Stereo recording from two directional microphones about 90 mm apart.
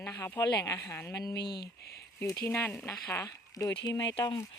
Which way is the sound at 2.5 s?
25° left (ahead or behind).